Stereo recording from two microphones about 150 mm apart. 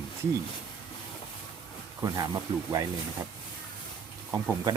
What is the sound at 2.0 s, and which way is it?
Speech, 25° right (ahead or behind).